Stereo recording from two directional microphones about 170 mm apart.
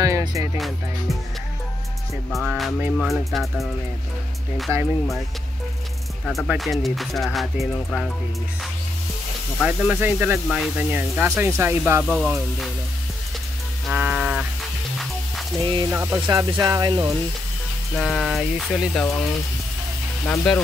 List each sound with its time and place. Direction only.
0.0 s music: 20° right (ahead or behind)
0.6 s speech: centre (ahead or behind)
2.3 s speech: centre (ahead or behind)
4.7 s speech: 20° right (ahead or behind)
6.2 s speech: 5° left (ahead or behind)
9.6 s speech: 5° right (ahead or behind)
13.8 s music: 5° right (ahead or behind)
15.9 s speech: 10° right (ahead or behind)
16.3 s speech: 25° right (ahead or behind)
17.9 s speech: centre (ahead or behind)
20.2 s speech: 5° left (ahead or behind)